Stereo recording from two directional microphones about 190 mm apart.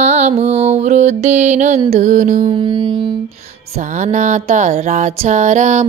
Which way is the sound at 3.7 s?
40° right (ahead or behind).